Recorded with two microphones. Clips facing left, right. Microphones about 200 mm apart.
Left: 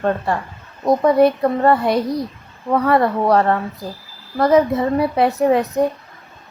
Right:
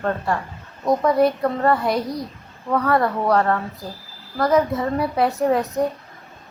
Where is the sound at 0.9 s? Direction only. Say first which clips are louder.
Left 4 dB; 25° left (ahead or behind).